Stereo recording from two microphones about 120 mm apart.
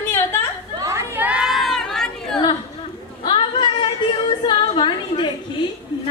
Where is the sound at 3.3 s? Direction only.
45° left (ahead or behind).